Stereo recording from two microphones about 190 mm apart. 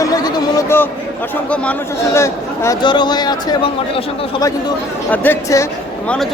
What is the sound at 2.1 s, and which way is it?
Speech, 15° left (ahead or behind).